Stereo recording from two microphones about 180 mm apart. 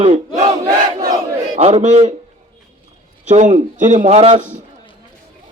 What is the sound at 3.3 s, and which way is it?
A man's voice, 40° right (ahead or behind).